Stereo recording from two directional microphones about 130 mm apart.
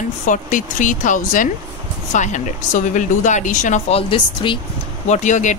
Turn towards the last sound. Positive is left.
turn(degrees=70)  # may be behind; listen again after turning